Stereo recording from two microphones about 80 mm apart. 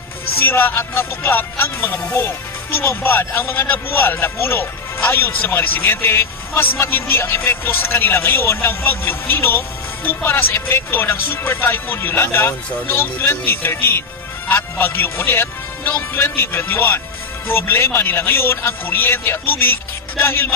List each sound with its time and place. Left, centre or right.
0.5 s music: left